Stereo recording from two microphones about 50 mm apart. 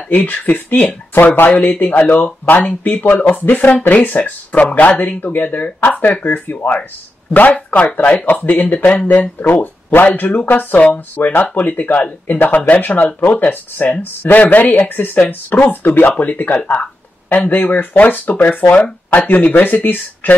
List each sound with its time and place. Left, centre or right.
0.1 s speech: left
1.1 s speech: left